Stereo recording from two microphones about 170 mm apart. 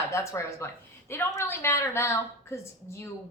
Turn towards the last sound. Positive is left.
turn(degrees=15)  # may be behind; listen again after turning